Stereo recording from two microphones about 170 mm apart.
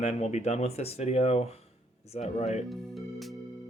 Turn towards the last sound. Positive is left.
turn(degrees=0)  # may be behind; listen again after turning